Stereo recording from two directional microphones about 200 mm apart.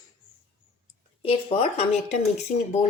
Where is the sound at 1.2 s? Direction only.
25° left (ahead or behind).